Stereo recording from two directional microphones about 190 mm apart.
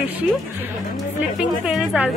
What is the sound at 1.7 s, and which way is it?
Speech, 5° right (ahead or behind).